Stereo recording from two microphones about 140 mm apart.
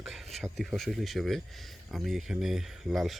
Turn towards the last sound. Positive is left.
turn(degrees=0)  # may be behind; listen again after turning